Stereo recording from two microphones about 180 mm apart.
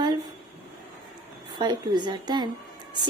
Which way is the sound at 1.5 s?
25° right (ahead or behind).